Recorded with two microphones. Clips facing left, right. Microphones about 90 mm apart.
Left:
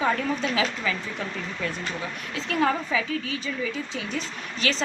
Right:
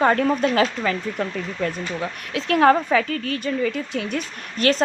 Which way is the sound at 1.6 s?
60° right (ahead or behind).